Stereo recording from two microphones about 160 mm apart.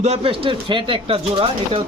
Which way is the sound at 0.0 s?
40° right (ahead or behind).